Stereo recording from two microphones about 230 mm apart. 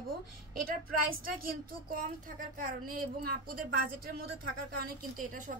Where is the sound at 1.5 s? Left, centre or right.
Right.